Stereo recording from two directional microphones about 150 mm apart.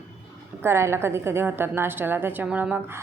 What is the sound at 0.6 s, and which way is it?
A woman's voice, 15° right (ahead or behind).